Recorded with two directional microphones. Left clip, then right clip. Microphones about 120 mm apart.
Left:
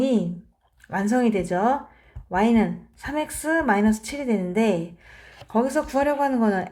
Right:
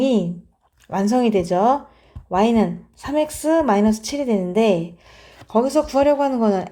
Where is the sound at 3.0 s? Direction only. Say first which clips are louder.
Right 6 dB; 60° right (ahead or behind).